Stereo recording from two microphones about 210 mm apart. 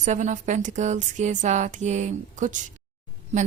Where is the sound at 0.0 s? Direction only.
35° right (ahead or behind).